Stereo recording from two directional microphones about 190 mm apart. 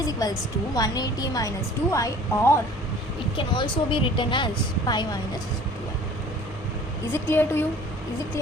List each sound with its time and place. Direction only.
0.0 s a woman's voice: 20° left (ahead or behind)
7.1 s a woman's voice: 10° left (ahead or behind)